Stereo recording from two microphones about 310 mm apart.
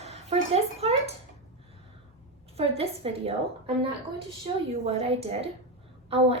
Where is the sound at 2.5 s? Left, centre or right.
Centre.